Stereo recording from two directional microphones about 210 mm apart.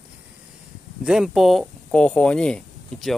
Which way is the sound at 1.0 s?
Centre (ahead or behind).